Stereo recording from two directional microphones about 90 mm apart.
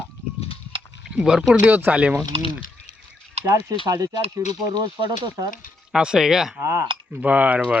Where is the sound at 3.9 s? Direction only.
40° right (ahead or behind).